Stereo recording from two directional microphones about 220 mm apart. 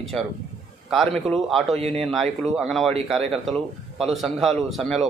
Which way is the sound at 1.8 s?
25° right (ahead or behind).